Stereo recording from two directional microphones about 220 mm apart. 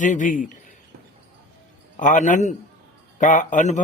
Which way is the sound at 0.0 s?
35° left (ahead or behind).